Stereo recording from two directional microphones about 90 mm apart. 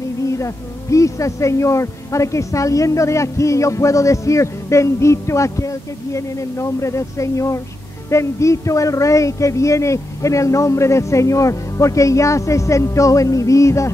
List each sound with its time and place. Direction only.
0.3 s speech: 35° left (ahead or behind)